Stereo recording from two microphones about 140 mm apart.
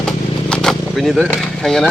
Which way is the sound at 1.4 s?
5° left (ahead or behind).